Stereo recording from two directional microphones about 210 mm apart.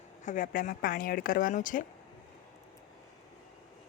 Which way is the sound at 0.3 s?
40° left (ahead or behind).